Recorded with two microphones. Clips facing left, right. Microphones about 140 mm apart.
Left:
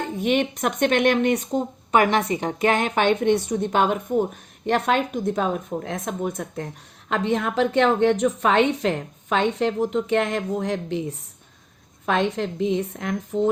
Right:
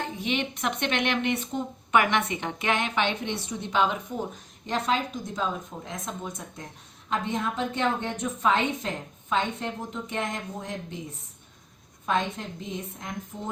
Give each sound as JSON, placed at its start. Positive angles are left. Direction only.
{"t": 0.2, "sound": "speech", "side_deg": 50}
{"t": 4.6, "sound": "speech", "side_deg": 65}
{"t": 7.1, "sound": "a woman's voice", "side_deg": 70}
{"t": 12.0, "sound": "a woman's voice", "side_deg": 75}